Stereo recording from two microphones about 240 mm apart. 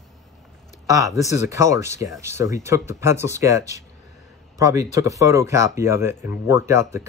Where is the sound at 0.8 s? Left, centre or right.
Centre.